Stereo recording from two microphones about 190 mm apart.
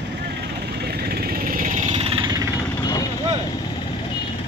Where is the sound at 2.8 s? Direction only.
20° left (ahead or behind).